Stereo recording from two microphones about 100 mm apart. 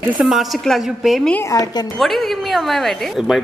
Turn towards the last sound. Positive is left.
turn(degrees=0)  # may be behind; listen again after turning